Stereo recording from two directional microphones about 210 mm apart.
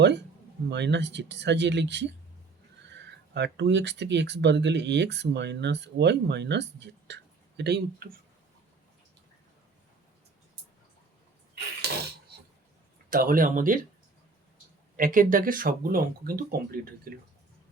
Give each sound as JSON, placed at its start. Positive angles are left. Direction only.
{"t": 0.7, "sound": "speech", "side_deg": -55}
{"t": 11.5, "sound": "a sound", "side_deg": -50}
{"t": 13.1, "sound": "speech", "side_deg": -40}
{"t": 14.9, "sound": "speech", "side_deg": -40}